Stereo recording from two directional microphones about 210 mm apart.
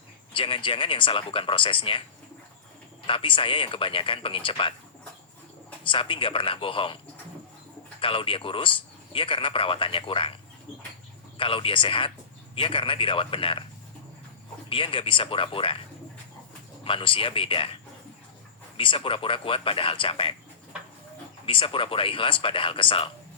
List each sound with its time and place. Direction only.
0.3 s a man's voice: 25° left (ahead or behind)
3.1 s a man's voice: 25° left (ahead or behind)
5.8 s a man's voice: 25° left (ahead or behind)
8.0 s a man's voice: 25° left (ahead or behind)
11.3 s a man's voice: 25° left (ahead or behind)
14.7 s a man's voice: 25° left (ahead or behind)
16.8 s a man's voice: 25° left (ahead or behind)
18.8 s a man's voice: 25° left (ahead or behind)
21.4 s a man's voice: 25° left (ahead or behind)